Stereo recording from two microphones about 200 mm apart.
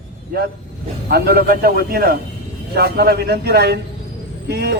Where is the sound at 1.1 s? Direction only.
50° right (ahead or behind).